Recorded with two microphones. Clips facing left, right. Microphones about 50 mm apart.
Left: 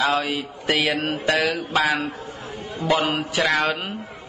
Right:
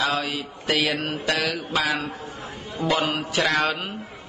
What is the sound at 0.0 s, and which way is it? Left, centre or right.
Mantra, left.